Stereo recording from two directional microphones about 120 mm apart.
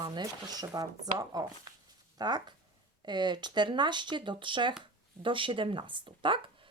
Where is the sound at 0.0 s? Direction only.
35° right (ahead or behind).